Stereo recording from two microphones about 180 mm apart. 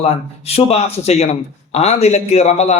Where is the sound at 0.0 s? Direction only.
35° left (ahead or behind).